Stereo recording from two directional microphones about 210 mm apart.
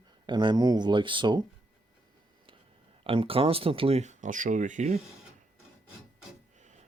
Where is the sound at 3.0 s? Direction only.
25° right (ahead or behind).